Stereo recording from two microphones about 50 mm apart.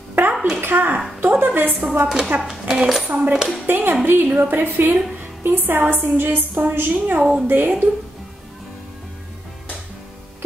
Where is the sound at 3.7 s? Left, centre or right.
Right.